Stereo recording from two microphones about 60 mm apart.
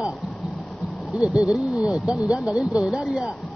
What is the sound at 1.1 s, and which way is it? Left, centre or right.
Speech, centre.